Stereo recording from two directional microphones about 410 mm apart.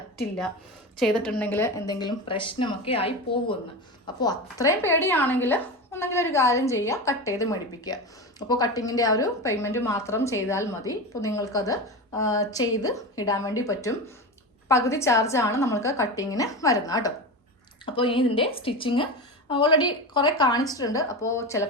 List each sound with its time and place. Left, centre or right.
0.9 s a woman's voice: centre